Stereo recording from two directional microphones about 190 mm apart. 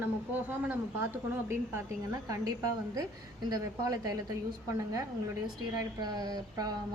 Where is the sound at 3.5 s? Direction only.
20° right (ahead or behind).